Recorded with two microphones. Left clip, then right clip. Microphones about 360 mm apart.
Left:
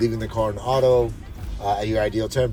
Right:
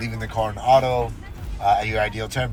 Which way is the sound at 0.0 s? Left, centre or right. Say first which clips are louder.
Left 3 dB; centre.